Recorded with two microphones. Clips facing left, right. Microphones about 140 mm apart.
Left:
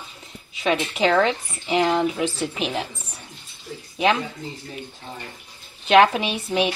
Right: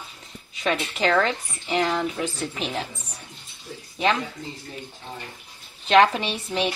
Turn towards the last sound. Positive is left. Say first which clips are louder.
# left 4 dB
turn(degrees=15)  # may be behind; listen again after turning